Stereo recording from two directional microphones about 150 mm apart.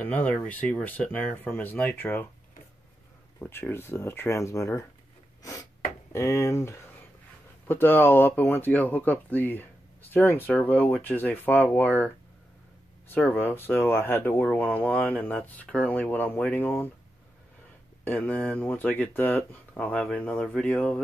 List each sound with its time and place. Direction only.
0.0 s speech: 10° left (ahead or behind)
3.3 s speech: 15° left (ahead or behind)
6.1 s speech: 20° left (ahead or behind)
13.1 s speech: 15° left (ahead or behind)
18.0 s speech: 10° left (ahead or behind)